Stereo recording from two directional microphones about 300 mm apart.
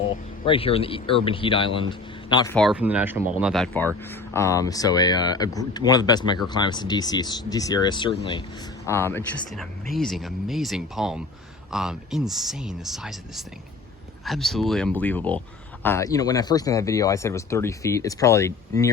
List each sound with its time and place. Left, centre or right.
0.4 s speech: centre
2.6 s speech: centre